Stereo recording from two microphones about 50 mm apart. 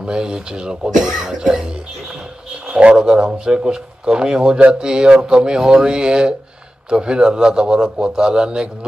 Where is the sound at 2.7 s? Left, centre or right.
Centre.